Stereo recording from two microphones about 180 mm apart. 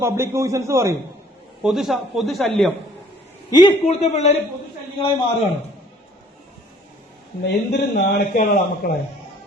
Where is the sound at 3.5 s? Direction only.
25° left (ahead or behind).